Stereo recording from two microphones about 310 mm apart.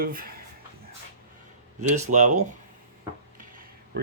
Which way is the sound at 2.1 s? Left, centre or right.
Right.